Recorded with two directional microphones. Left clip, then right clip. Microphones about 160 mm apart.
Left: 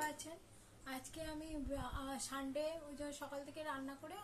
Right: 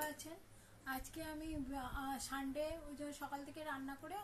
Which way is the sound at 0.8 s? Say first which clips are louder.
Right 2 dB; 15° left (ahead or behind).